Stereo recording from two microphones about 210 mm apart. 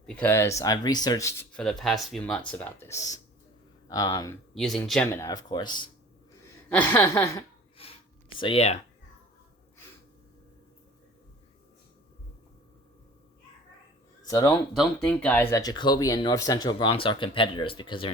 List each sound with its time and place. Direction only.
0.0 s speech: 10° left (ahead or behind)
4.5 s speech: centre (ahead or behind); by 5.9 s 20° left (ahead or behind)
6.7 s speech: 10° left (ahead or behind)
7.8 s a sound: 25° left (ahead or behind)
14.3 s speech: 15° left (ahead or behind)